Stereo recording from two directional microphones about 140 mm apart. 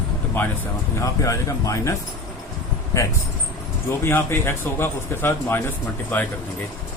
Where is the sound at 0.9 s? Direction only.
20° left (ahead or behind).